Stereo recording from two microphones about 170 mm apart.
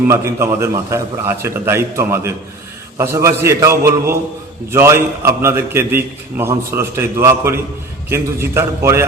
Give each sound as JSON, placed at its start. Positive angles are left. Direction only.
{"t": 0.1, "sound": "a man's voice", "side_deg": -15}